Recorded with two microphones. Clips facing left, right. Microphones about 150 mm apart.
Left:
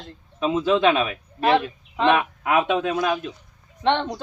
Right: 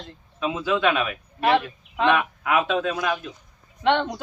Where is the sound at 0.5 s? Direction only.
20° left (ahead or behind).